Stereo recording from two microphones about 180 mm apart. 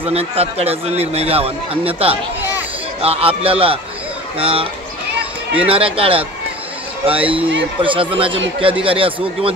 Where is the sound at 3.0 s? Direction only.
35° right (ahead or behind).